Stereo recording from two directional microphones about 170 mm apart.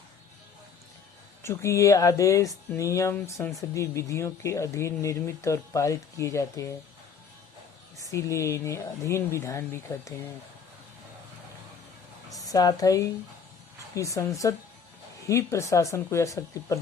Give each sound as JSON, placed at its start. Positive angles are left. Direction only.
{"t": 1.4, "sound": "speech", "side_deg": 15}
{"t": 7.9, "sound": "speech", "side_deg": 15}
{"t": 12.5, "sound": "speech", "side_deg": 20}